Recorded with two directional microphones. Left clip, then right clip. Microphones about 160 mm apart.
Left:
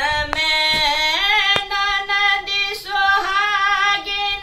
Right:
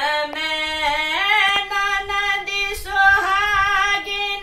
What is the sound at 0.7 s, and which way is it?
Singing, 5° left (ahead or behind).